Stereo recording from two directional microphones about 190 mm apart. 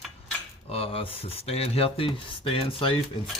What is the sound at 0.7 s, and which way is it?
Speech, 30° left (ahead or behind).